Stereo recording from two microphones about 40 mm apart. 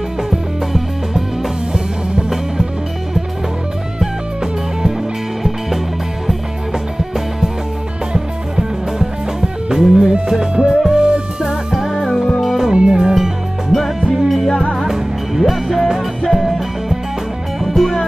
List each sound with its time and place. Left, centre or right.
0.3 s music: centre
2.2 s music: centre
8.1 s music: right
10.5 s music: right
12.4 s music: centre
12.7 s music: right
13.1 s music: centre
17.6 s music: centre